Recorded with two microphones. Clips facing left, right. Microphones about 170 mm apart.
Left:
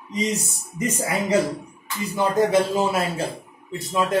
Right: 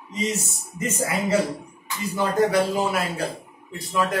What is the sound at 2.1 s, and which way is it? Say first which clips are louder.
A man's voice: left 1 dB; 25° left (ahead or behind).